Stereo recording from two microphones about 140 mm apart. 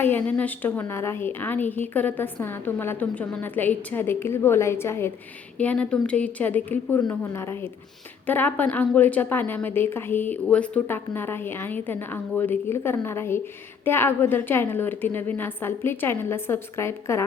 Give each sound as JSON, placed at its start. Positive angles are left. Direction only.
{"t": 0.0, "sound": "a woman's voice", "side_deg": 10}